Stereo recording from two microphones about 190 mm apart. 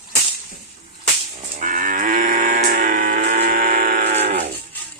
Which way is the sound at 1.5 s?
45° right (ahead or behind).